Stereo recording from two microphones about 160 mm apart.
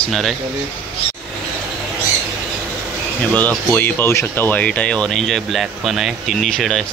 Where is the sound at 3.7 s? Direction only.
10° left (ahead or behind).